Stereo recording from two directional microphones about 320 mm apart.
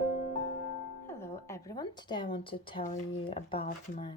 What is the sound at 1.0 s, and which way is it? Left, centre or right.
Speech, centre.